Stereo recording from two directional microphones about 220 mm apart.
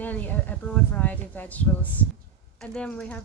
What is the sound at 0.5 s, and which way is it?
A woman's voice, 10° left (ahead or behind).